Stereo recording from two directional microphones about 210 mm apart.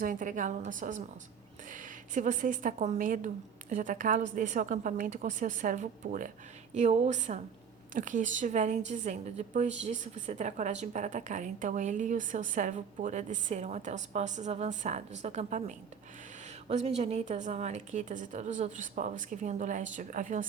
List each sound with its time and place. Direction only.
0.0 s a woman's voice: 40° right (ahead or behind)